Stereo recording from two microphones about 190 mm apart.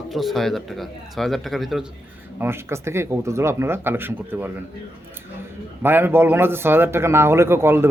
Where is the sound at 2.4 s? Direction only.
15° right (ahead or behind).